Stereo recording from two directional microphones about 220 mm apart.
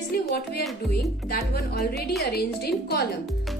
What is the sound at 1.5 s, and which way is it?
Speech, 45° left (ahead or behind).